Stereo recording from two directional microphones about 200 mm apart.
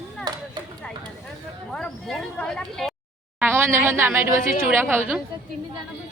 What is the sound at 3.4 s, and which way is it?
A woman's voice, 10° right (ahead or behind).